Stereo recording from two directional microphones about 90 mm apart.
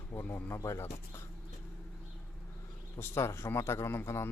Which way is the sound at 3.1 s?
30° left (ahead or behind).